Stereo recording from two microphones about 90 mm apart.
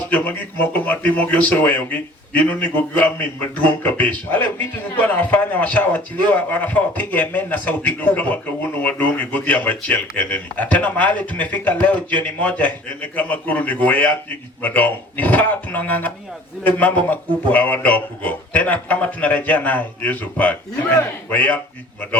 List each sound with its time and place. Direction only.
0.1 s a man's voice: 20° left (ahead or behind)